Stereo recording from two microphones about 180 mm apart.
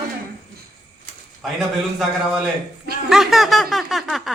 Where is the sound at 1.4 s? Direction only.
Centre (ahead or behind).